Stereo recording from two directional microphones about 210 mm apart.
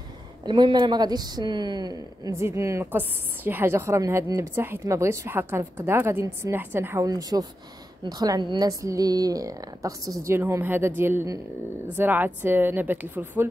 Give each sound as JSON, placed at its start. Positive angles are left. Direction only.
{"t": 0.5, "sound": "speech", "side_deg": -20}